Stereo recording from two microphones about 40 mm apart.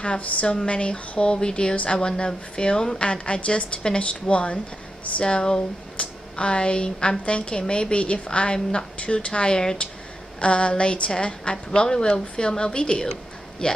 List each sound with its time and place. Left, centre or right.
0.2 s a woman's voice: left